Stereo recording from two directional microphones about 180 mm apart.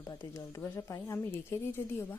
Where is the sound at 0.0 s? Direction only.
15° left (ahead or behind).